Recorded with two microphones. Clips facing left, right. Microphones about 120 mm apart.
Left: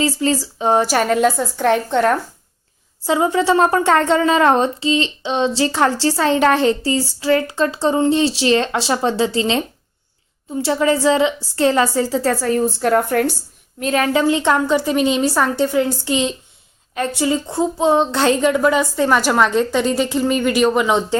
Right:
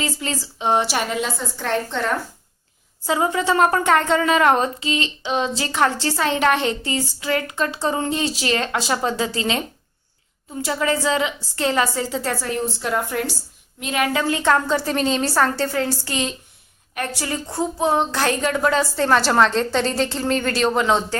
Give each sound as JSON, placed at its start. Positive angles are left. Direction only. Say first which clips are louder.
{"t": 0.0, "sound": "a woman's voice", "louder": "left 8 dB", "side_deg": 35}
{"t": 3.1, "sound": "a woman's voice", "louder": "left 4 dB", "side_deg": 25}
{"t": 13.7, "sound": "a woman's voice", "louder": "left 5 dB", "side_deg": 40}